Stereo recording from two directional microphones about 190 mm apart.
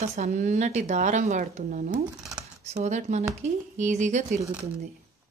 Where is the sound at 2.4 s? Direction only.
35° right (ahead or behind).